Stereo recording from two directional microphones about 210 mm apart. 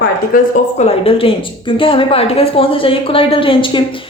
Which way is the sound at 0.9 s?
25° left (ahead or behind).